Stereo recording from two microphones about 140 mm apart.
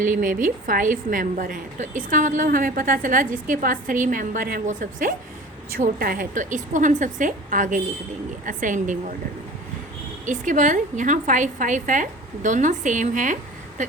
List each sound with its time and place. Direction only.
0.0 s a woman's voice: 70° right (ahead or behind)
5.7 s a woman's voice: 85° right; by 9.1 s 65° right (ahead or behind)
10.2 s a woman's voice: 65° right (ahead or behind)